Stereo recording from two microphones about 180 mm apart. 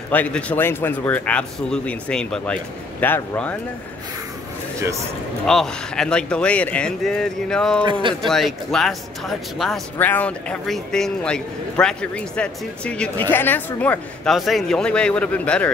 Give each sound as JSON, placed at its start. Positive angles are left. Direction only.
{"t": 0.1, "sound": "speech", "side_deg": 10}
{"t": 5.5, "sound": "speech", "side_deg": 5}
{"t": 7.8, "sound": "speech", "side_deg": -25}
{"t": 8.3, "sound": "speech", "side_deg": 0}